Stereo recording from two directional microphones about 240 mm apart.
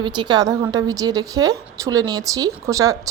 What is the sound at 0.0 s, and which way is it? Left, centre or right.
Speech, centre.